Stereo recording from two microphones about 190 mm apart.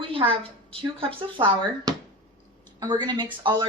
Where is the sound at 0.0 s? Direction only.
30° right (ahead or behind).